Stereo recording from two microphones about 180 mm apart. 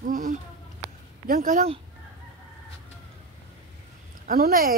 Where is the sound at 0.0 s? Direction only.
45° right (ahead or behind).